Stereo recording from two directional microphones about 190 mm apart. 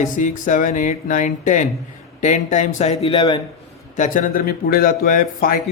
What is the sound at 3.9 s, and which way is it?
Speech, 40° left (ahead or behind).